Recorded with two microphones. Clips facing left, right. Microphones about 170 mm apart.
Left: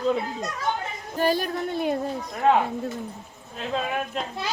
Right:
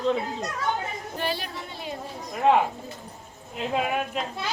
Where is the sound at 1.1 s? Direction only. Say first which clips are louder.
Left 9 dB; 45° left (ahead or behind).